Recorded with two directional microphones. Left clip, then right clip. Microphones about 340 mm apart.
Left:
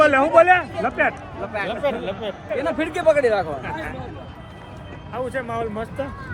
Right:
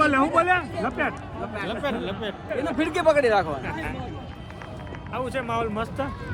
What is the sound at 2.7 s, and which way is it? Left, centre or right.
Speech, right.